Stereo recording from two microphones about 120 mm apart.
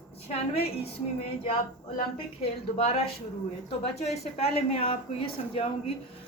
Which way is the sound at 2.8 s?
60° left (ahead or behind).